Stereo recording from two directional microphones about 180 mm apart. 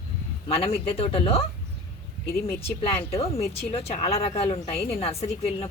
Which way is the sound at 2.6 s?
35° left (ahead or behind).